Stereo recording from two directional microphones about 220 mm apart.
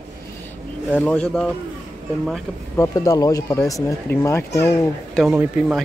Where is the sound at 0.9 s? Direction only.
5° left (ahead or behind).